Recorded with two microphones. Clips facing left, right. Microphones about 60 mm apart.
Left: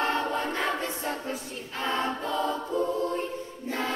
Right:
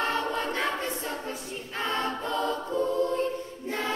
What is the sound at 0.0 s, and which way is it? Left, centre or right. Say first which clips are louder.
Choir: left 1 dB; left.